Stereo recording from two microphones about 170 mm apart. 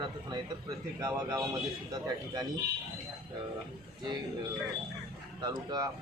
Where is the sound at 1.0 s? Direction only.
20° right (ahead or behind).